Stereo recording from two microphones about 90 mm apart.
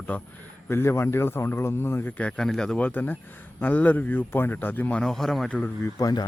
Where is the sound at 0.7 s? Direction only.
30° left (ahead or behind).